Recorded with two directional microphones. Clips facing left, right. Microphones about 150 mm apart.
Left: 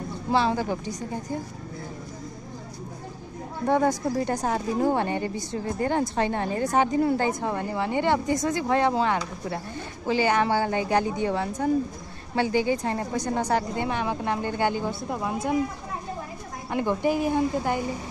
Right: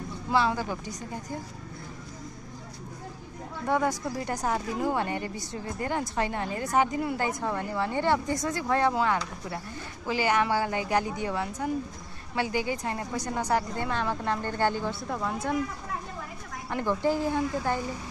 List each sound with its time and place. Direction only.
0.3 s speech: 25° left (ahead or behind)
3.6 s a woman's voice: 35° left (ahead or behind)
16.7 s a woman's voice: 15° left (ahead or behind)